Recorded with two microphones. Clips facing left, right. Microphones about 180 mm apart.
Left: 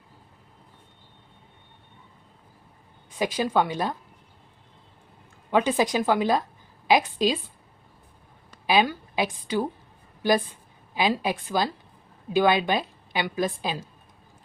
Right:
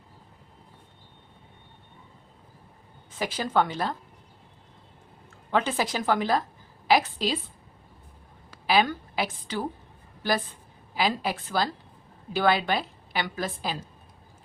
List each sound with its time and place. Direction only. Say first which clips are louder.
3.2 s a woman's voice: left 2 dB; 15° left (ahead or behind)
5.5 s a woman's voice: left 4 dB; 15° left (ahead or behind)
8.6 s a woman's voice: left 1 dB; 15° left (ahead or behind)